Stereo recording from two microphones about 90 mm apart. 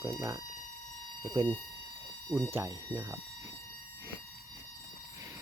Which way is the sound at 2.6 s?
50° right (ahead or behind).